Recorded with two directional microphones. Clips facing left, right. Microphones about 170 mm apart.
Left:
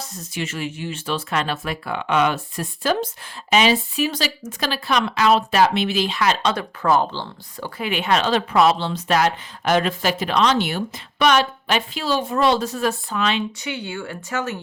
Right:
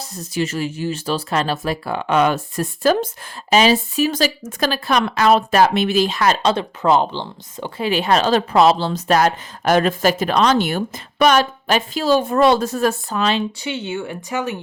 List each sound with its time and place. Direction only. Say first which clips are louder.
0.0 s speech: right 6 dB; 35° right (ahead or behind)
6.5 s speech: right 3 dB; 20° right (ahead or behind)
7.9 s speech: right 4 dB; 35° right (ahead or behind); by 14.6 s 15° right (ahead or behind)